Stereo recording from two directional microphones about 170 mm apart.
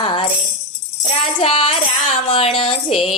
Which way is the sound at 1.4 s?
30° left (ahead or behind).